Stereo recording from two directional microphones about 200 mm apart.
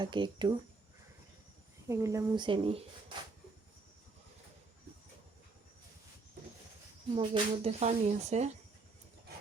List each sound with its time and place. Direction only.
0.0 s speech: 25° right (ahead or behind)
1.9 s speech: 15° right (ahead or behind)
7.1 s speech: 30° right (ahead or behind)